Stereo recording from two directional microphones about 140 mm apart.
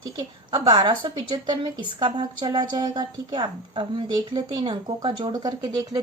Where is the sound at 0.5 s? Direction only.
35° right (ahead or behind).